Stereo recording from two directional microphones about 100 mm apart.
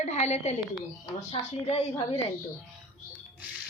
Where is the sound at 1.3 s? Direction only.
90° left.